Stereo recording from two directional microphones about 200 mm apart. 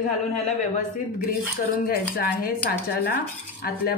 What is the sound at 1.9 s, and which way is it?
A woman's voice, 50° left (ahead or behind).